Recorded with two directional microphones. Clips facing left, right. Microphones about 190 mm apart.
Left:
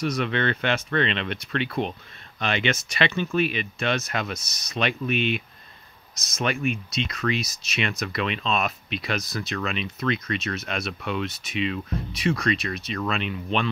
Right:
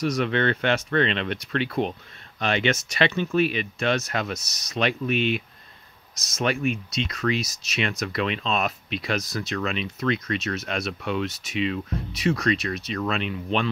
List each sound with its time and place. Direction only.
0.0 s speech: 40° right (ahead or behind)